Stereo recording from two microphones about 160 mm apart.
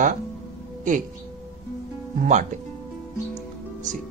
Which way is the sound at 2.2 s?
50° right (ahead or behind).